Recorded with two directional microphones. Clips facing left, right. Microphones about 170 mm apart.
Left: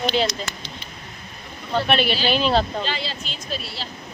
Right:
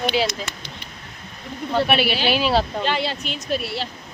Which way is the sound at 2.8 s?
60° right (ahead or behind).